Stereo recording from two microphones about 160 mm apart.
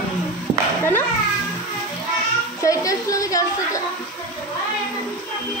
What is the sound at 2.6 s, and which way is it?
A woman's voice, 20° left (ahead or behind).